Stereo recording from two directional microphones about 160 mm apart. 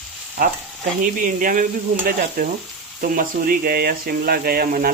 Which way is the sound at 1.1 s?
55° right (ahead or behind).